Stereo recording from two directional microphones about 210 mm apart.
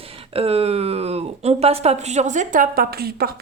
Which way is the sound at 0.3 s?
30° right (ahead or behind).